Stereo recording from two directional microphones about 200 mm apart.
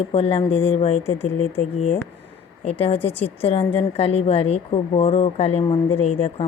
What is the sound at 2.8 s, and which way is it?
Speech, 30° left (ahead or behind).